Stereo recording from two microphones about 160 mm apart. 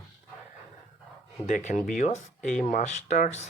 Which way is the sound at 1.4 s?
50° left (ahead or behind).